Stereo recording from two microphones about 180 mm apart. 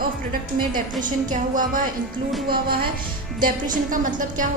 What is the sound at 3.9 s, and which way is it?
Speech, 45° right (ahead or behind).